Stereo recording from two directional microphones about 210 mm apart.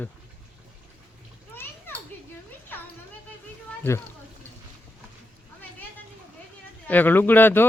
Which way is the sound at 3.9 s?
10° left (ahead or behind).